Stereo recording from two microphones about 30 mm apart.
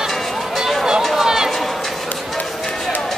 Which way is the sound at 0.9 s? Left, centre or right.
Right.